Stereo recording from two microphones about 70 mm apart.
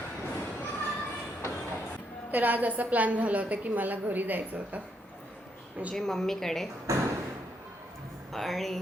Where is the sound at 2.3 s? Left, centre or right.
Right.